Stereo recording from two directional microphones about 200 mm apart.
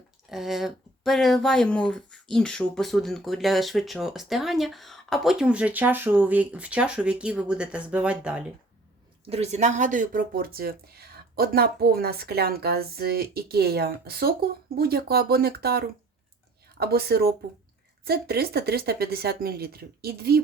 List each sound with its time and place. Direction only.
0.3 s speech: centre (ahead or behind)
9.3 s speech: 35° right (ahead or behind); by 20.4 s 50° right (ahead or behind)